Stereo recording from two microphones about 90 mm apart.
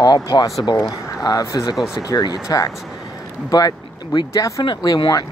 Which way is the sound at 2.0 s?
45° left (ahead or behind).